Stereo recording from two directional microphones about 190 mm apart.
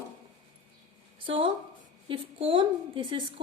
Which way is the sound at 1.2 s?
25° right (ahead or behind).